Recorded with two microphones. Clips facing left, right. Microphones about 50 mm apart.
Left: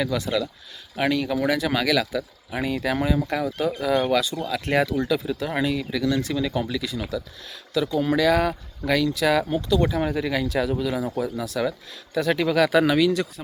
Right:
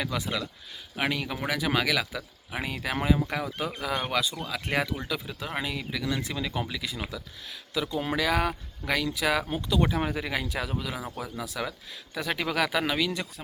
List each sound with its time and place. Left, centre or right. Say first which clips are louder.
0.0 s speech: left 6 dB; centre